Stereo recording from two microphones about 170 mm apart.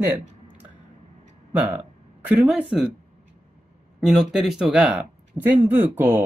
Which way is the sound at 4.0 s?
Centre (ahead or behind).